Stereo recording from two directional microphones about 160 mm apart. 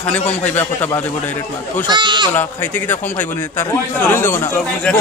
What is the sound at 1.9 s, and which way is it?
Speech, 30° right (ahead or behind).